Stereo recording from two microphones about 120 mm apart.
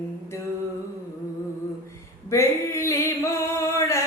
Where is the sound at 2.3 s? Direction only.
25° left (ahead or behind).